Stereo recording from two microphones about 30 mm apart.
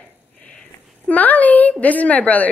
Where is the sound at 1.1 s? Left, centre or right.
Left.